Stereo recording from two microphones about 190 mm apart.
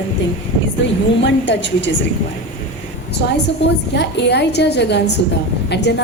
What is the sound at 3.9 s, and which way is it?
A woman's voice, 65° left (ahead or behind).